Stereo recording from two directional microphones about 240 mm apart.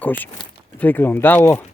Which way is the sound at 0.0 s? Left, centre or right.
Centre.